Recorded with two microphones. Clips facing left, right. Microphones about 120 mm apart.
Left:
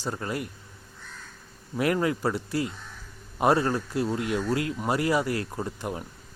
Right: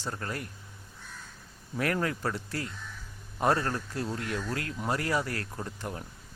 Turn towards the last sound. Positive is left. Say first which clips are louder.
# left 5 dB
turn(degrees=15)  # may be behind; listen again after turning